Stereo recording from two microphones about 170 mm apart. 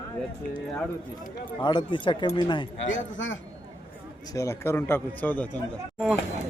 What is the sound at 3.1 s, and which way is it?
Speech, 90° left.